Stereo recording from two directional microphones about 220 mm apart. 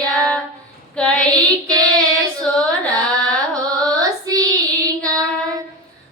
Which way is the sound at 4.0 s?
15° right (ahead or behind).